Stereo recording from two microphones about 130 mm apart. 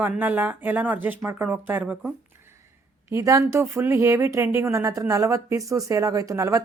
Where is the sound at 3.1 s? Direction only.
25° right (ahead or behind).